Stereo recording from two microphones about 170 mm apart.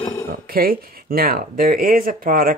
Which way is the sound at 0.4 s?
60° right (ahead or behind).